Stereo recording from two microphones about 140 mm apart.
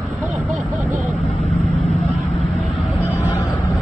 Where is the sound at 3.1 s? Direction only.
60° right (ahead or behind).